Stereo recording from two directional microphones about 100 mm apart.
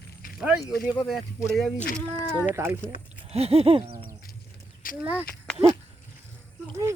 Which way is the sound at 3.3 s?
85° right.